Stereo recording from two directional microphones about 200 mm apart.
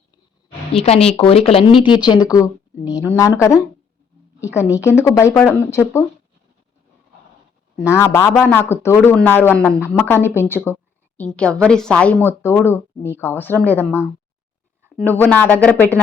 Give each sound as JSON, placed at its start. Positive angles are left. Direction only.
{"t": 0.1, "sound": "a sound", "side_deg": 25}
{"t": 1.8, "sound": "a woman's voice", "side_deg": 20}
{"t": 7.9, "sound": "a woman's voice", "side_deg": 15}